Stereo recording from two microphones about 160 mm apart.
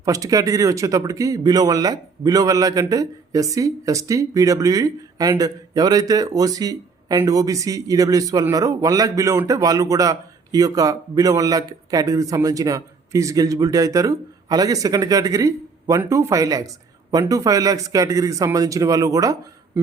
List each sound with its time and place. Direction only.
0.0 s speech: 20° right (ahead or behind)